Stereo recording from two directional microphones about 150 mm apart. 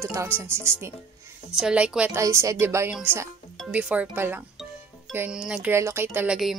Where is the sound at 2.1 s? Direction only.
20° right (ahead or behind).